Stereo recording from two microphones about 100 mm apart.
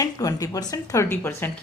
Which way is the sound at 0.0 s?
35° left (ahead or behind).